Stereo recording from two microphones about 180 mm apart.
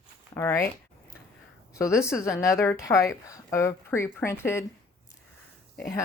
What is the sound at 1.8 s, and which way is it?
Speech, 15° left (ahead or behind).